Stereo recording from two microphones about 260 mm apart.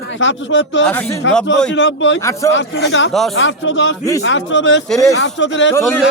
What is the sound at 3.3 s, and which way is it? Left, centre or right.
Speech, left.